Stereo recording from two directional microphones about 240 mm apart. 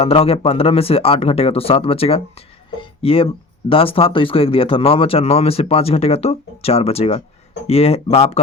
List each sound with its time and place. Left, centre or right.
0.0 s speech: left